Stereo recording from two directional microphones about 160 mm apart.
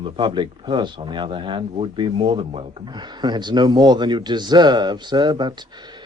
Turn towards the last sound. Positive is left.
turn(degrees=-30)  # may be behind; listen again after turning